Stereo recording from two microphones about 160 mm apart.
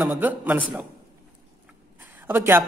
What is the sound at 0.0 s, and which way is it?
Speech, 10° right (ahead or behind).